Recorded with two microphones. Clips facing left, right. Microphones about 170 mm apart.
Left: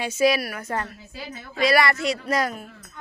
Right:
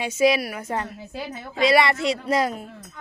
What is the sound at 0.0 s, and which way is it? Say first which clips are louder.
Speech: right 1 dB; 20° right (ahead or behind).